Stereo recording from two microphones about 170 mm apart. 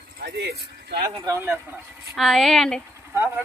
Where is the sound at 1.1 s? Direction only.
20° right (ahead or behind).